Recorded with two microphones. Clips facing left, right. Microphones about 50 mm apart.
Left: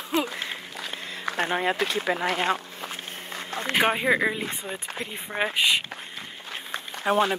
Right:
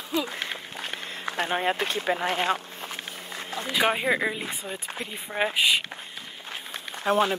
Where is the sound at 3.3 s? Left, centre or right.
Left.